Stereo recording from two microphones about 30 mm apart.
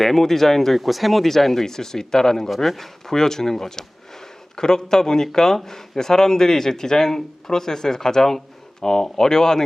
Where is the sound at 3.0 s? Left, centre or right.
Centre.